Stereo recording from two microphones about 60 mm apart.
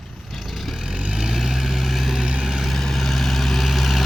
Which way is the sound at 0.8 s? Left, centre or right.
Centre.